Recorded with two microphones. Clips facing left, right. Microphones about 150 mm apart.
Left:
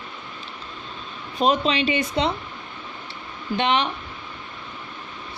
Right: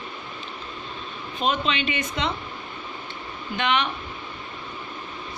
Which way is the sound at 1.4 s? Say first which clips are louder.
Left 5 dB; 35° left (ahead or behind).